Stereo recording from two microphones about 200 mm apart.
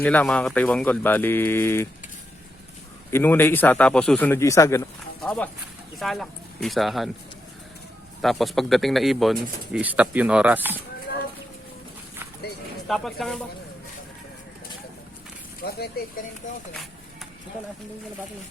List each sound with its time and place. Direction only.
0.0 s speech: 5° left (ahead or behind)
3.1 s speech: 10° left (ahead or behind)
5.2 s speech: 5° left (ahead or behind)
8.2 s speech: centre (ahead or behind)
12.9 s speech: centre (ahead or behind)
15.6 s speech: 50° left (ahead or behind)
16.4 s speech: 40° left (ahead or behind)